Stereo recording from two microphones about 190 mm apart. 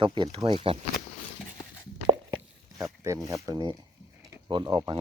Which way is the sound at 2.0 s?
15° right (ahead or behind).